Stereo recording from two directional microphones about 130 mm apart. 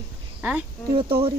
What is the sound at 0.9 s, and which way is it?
Speech, 40° right (ahead or behind).